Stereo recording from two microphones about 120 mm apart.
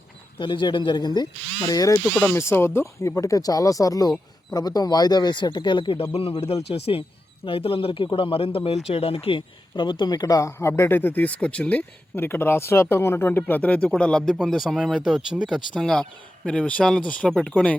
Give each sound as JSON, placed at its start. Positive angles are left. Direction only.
{"t": 0.3, "sound": "speech", "side_deg": 40}
{"t": 2.2, "sound": "speech", "side_deg": 20}